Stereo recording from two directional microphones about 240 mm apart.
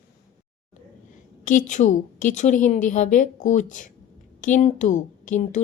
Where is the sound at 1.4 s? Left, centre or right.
Left.